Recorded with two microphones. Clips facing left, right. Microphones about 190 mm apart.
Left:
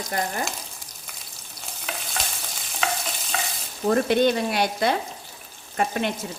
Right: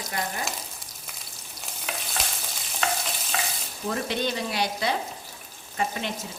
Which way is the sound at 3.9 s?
55° left (ahead or behind).